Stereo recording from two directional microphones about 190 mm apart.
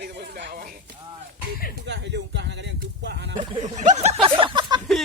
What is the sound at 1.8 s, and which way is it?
Speech, 70° right (ahead or behind).